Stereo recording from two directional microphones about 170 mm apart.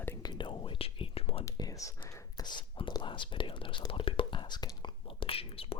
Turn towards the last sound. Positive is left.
turn(degrees=35)  # may be behind; listen again after turning